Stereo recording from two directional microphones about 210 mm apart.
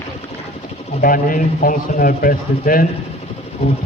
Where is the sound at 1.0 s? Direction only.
40° left (ahead or behind).